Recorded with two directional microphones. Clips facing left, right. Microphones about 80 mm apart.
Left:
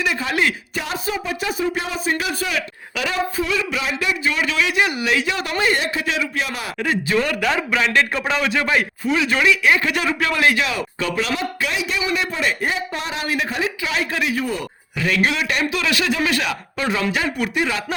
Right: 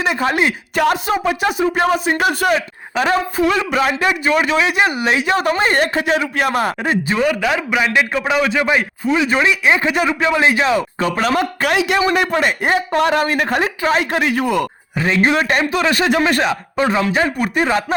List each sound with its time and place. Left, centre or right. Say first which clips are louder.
0.0 s speech: right 5 dB; right
0.8 s speech: right 12 dB; right
2.6 s a man's voice: right 5 dB; right
7.2 s a man's voice: right 3 dB; centre; by 11.3 s right
11.3 s a man's voice: right 7 dB; right
14.4 s speech: right 7 dB; right
14.9 s a man's voice: right 4 dB; right
15.4 s speech: right 6 dB; right
17.4 s speech: right 5 dB; right